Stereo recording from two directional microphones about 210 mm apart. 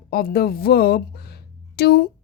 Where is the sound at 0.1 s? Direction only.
45° left (ahead or behind).